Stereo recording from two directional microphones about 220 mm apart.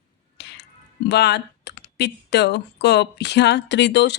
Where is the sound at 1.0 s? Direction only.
50° left (ahead or behind).